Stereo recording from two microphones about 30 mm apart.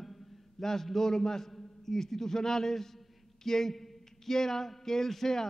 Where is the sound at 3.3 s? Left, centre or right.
Centre.